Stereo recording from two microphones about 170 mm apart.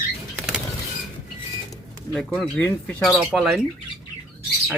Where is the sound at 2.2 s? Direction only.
5° left (ahead or behind).